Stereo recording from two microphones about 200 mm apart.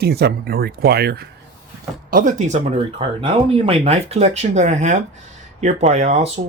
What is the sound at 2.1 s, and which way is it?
Speech, 40° right (ahead or behind).